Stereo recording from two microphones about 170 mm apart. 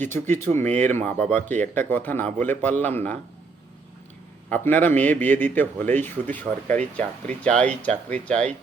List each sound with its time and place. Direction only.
0.0 s speech: 15° left (ahead or behind)
4.4 s speech: 10° left (ahead or behind)